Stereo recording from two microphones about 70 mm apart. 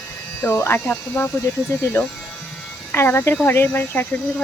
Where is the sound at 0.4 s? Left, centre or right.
Left.